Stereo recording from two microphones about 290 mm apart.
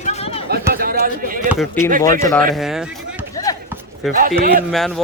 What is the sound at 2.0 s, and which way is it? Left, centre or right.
Speech, centre.